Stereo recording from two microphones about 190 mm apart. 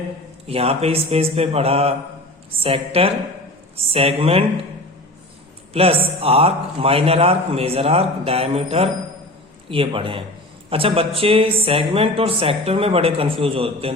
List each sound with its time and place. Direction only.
0.4 s a man's voice: 30° right (ahead or behind)
5.7 s a man's voice: 30° right (ahead or behind)